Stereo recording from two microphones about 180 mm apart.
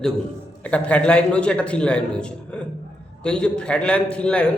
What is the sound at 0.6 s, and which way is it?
A man's voice, 5° left (ahead or behind).